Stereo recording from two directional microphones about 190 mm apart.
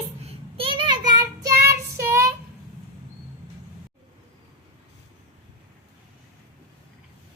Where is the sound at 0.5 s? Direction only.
30° right (ahead or behind).